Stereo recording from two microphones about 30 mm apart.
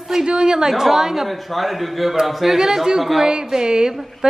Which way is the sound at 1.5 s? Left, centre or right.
Centre.